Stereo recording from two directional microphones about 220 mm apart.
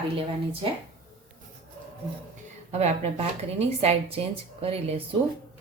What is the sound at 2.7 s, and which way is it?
A woman's voice, 30° right (ahead or behind).